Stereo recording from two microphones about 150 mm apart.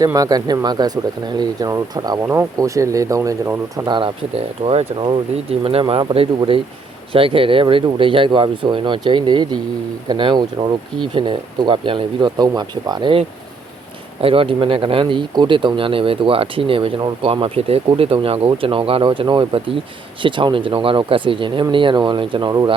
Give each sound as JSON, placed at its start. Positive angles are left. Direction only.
{"t": 0.0, "sound": "speech", "side_deg": -25}
{"t": 2.2, "sound": "speech", "side_deg": -15}
{"t": 3.8, "sound": "speech", "side_deg": -35}